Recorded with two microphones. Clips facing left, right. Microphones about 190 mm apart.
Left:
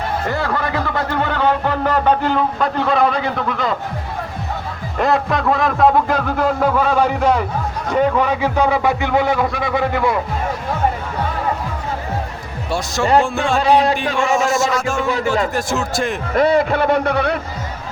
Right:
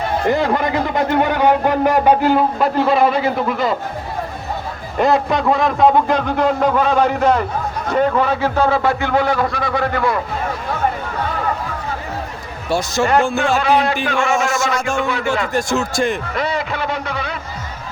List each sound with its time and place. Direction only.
0.3 s a man's voice: 20° right (ahead or behind)
4.9 s a man's voice: centre (ahead or behind)
12.7 s a man's voice: centre (ahead or behind)
13.6 s speech: 35° left (ahead or behind)
14.3 s a man's voice: centre (ahead or behind)
15.0 s speech: 35° left (ahead or behind)
15.5 s a man's voice: centre (ahead or behind)
16.3 s a man's voice: 50° left (ahead or behind)